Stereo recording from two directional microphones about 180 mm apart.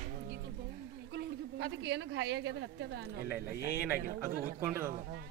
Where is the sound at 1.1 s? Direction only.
70° right (ahead or behind).